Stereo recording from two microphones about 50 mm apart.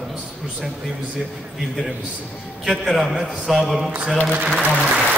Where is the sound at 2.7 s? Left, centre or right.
Centre.